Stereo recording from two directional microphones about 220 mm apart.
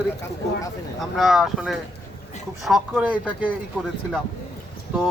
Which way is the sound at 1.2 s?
Centre (ahead or behind).